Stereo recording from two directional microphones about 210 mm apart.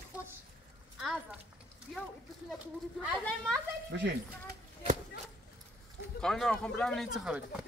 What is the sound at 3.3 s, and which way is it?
Speech, centre (ahead or behind).